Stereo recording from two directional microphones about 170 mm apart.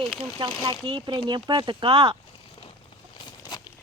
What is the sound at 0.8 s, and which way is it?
Speech, 25° right (ahead or behind).